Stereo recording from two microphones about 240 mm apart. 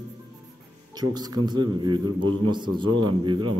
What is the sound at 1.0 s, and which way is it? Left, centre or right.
A man's voice, centre.